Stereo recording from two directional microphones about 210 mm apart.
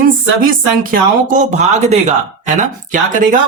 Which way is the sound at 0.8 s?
40° right (ahead or behind).